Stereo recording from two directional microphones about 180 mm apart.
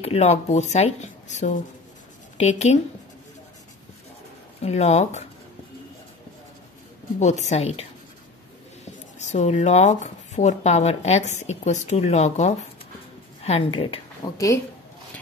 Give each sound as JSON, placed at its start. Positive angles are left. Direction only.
{"t": 0.0, "sound": "speech", "side_deg": 35}
{"t": 4.6, "sound": "speech", "side_deg": 35}
{"t": 7.2, "sound": "speech", "side_deg": 40}
{"t": 9.2, "sound": "speech", "side_deg": 40}